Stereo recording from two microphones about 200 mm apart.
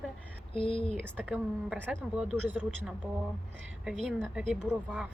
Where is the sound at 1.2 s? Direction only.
5° right (ahead or behind).